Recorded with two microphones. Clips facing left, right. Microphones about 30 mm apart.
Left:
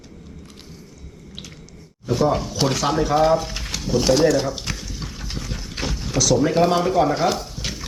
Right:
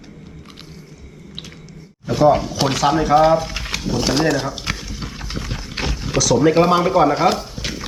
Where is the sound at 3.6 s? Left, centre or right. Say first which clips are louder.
Right 4 dB; right.